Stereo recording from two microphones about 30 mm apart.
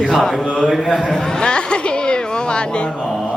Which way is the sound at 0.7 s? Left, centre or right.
Centre.